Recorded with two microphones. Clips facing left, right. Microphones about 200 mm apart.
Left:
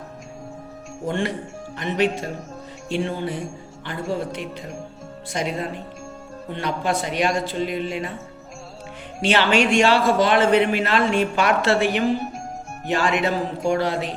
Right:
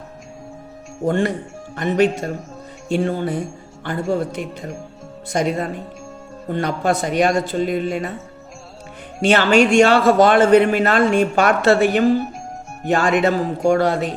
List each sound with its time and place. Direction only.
1.0 s a man's voice: 45° right (ahead or behind)
9.2 s a man's voice: 45° right (ahead or behind)